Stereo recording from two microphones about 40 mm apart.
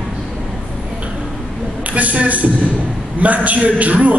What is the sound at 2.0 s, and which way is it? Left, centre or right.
A man's voice, right.